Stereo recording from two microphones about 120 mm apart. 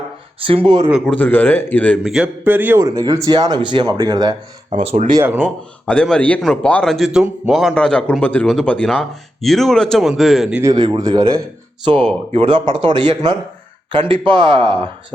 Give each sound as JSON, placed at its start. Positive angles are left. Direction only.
{"t": 0.4, "sound": "speech", "side_deg": -45}
{"t": 0.9, "sound": "speech", "side_deg": -5}
{"t": 1.1, "sound": "a man's voice", "side_deg": 15}
{"t": 2.0, "sound": "speech", "side_deg": -5}
{"t": 2.4, "sound": "a man's voice", "side_deg": -15}
{"t": 2.8, "sound": "speech", "side_deg": -30}
{"t": 4.8, "sound": "speech", "side_deg": -55}
{"t": 5.4, "sound": "a man's voice", "side_deg": 5}
{"t": 10.6, "sound": "speech", "side_deg": -35}
{"t": 11.9, "sound": "speech", "side_deg": -50}